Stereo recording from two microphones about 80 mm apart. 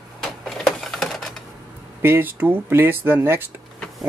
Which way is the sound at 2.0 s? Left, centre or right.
Right.